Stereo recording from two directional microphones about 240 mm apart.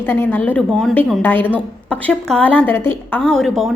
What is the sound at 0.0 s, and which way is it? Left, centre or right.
A woman's voice, centre.